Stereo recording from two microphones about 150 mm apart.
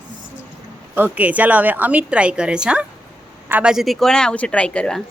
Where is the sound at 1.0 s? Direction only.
10° right (ahead or behind); by 5.0 s 5° left (ahead or behind).